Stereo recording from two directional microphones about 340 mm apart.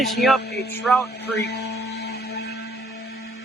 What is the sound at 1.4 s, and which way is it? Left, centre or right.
Music, left.